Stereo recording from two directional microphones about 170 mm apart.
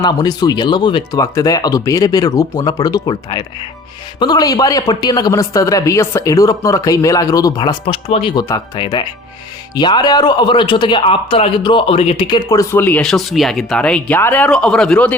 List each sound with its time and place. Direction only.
0.0 s a man's voice: 25° left (ahead or behind); by 15.1 s 5° left (ahead or behind)